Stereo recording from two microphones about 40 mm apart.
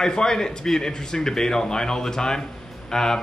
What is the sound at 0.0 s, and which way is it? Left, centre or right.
Speech, centre.